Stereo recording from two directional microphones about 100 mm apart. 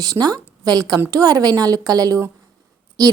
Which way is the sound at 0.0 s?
40° right (ahead or behind).